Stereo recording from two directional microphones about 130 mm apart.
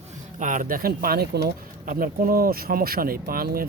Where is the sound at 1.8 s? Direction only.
90° right.